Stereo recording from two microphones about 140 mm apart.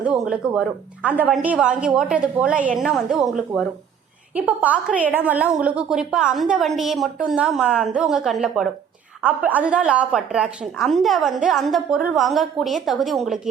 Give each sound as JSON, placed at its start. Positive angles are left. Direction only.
{"t": 0.0, "sound": "a woman's voice", "side_deg": -5}
{"t": 4.4, "sound": "a woman's voice", "side_deg": -10}